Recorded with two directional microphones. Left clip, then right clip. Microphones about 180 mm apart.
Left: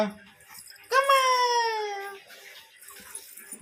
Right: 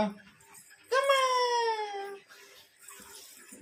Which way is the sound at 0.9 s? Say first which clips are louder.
Left 5 dB; 30° left (ahead or behind).